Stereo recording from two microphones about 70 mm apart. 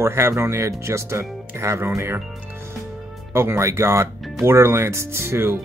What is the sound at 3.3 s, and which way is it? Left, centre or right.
Speech, right.